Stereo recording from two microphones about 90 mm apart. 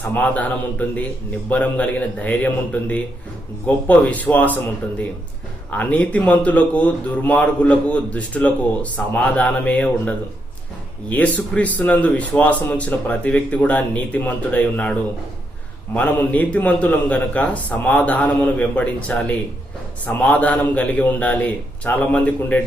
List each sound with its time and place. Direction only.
0.0 s speech: 20° left (ahead or behind)
5.7 s speech: 15° left (ahead or behind)
16.0 s speech: 15° left (ahead or behind)